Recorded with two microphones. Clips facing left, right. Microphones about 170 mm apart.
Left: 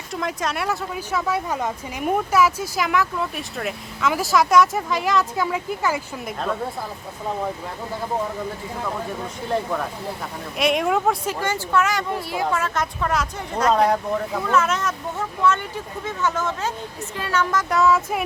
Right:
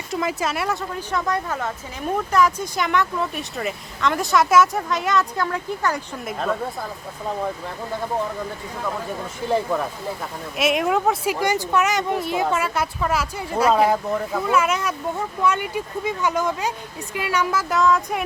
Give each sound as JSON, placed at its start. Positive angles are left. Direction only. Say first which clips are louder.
{"t": 0.1, "sound": "speech", "louder": "right 2 dB", "side_deg": -5}
{"t": 10.6, "sound": "speech", "louder": "even", "side_deg": 0}
{"t": 11.3, "sound": "speech", "louder": "right 3 dB", "side_deg": -15}
{"t": 12.6, "sound": "speech", "louder": "right 1 dB", "side_deg": -10}